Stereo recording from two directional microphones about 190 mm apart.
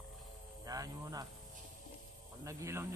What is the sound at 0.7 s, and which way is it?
Speech, 20° right (ahead or behind).